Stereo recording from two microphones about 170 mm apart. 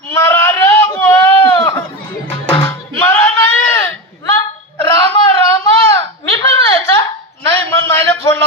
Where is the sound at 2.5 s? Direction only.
25° left (ahead or behind).